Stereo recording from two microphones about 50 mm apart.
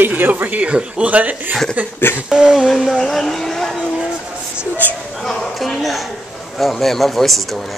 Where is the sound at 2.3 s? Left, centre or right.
Centre.